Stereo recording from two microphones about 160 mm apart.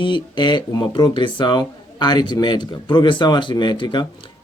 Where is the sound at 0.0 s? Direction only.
30° left (ahead or behind).